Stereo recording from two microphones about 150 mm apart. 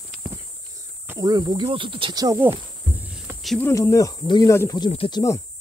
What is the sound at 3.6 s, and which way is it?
Speech, 20° left (ahead or behind).